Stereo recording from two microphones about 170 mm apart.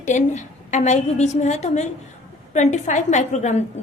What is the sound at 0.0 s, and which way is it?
A woman's voice, 45° left (ahead or behind).